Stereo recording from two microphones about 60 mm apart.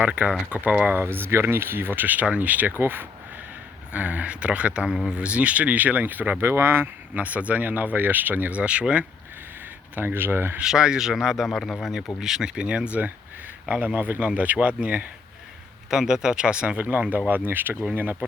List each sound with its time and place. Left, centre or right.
0.0 s speech: right
0.9 s speech: right
3.9 s speech: right
6.4 s speech: right
7.1 s speech: right
9.9 s speech: right
10.6 s speech: centre
15.9 s speech: centre; by 17.7 s right